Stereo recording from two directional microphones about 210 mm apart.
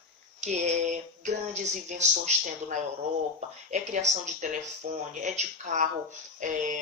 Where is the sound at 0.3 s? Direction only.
35° right (ahead or behind).